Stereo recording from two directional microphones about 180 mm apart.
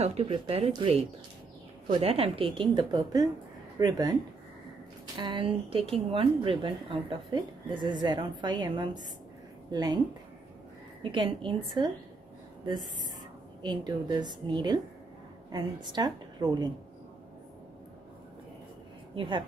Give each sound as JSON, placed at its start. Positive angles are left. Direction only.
{"t": 0.0, "sound": "a woman's voice", "side_deg": -35}
{"t": 11.0, "sound": "a woman's voice", "side_deg": -30}
{"t": 13.6, "sound": "a woman's voice", "side_deg": -25}
{"t": 19.1, "sound": "speech", "side_deg": -25}